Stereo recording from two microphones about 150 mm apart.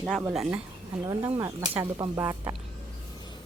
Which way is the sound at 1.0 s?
20° right (ahead or behind).